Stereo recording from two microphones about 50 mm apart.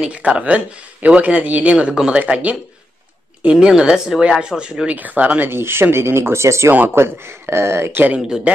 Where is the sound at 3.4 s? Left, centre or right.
Centre.